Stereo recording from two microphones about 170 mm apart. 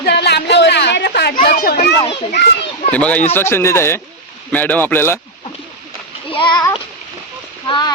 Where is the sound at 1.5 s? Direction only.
60° left (ahead or behind).